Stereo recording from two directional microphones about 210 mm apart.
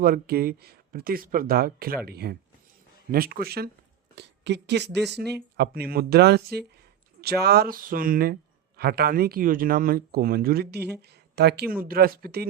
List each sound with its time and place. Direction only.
0.0 s speech: 45° right (ahead or behind)